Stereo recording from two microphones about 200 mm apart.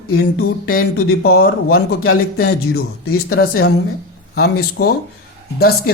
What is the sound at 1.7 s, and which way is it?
Speech, 50° left (ahead or behind).